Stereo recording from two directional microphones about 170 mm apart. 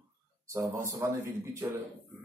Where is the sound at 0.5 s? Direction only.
15° right (ahead or behind).